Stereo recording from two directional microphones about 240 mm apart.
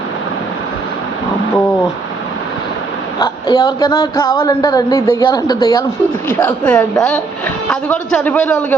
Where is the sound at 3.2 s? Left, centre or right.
Centre.